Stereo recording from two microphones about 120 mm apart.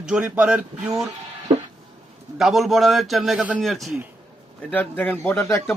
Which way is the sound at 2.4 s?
Centre (ahead or behind).